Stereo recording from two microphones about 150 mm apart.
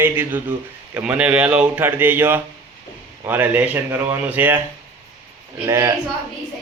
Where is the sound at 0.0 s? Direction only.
15° right (ahead or behind).